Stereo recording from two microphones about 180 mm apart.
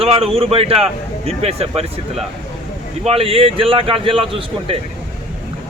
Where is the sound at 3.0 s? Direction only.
35° right (ahead or behind).